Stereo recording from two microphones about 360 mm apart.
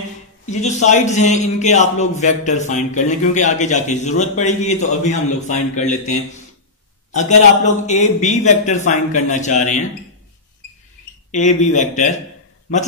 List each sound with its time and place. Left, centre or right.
0.5 s a man's voice: centre
11.3 s a man's voice: centre